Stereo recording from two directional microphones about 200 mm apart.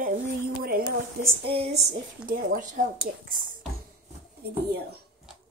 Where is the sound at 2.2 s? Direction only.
40° right (ahead or behind).